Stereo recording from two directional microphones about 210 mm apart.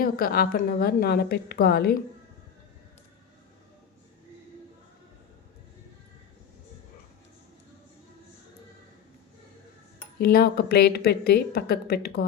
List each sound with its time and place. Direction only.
0.0 s speech: 45° left (ahead or behind)
10.2 s speech: 45° left (ahead or behind)